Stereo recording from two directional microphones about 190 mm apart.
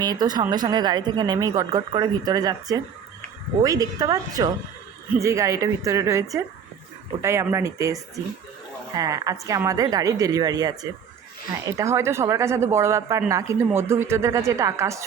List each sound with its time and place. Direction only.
0.0 s speech: 20° right (ahead or behind)